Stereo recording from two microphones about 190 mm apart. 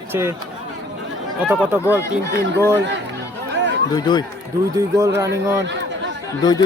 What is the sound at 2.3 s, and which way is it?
Speech, 70° right (ahead or behind).